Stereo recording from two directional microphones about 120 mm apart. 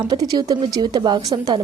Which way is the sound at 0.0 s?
35° right (ahead or behind).